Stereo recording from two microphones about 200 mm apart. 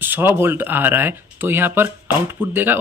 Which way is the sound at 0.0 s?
10° right (ahead or behind).